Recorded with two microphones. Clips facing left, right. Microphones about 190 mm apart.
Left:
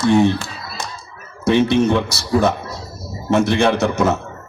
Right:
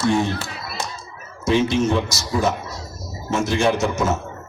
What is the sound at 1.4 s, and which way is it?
A man's voice, 60° left (ahead or behind).